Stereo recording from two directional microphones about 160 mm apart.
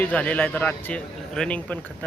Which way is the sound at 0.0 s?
10° left (ahead or behind).